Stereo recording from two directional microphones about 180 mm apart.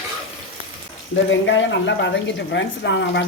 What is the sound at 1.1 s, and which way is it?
Speech, 90° left.